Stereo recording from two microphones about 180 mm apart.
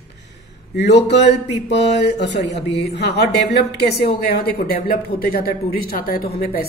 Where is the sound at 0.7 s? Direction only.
70° left (ahead or behind).